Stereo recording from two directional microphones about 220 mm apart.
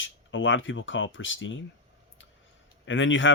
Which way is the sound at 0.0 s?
60° left (ahead or behind).